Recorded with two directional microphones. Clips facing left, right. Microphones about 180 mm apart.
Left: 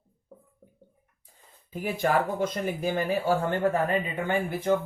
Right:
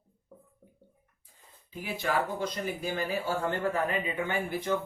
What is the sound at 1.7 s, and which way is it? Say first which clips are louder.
Speech: left 5 dB; 50° left (ahead or behind).